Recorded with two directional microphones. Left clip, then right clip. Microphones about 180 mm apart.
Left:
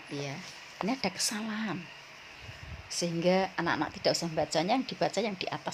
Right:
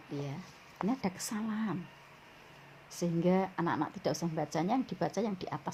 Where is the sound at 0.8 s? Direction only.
10° left (ahead or behind).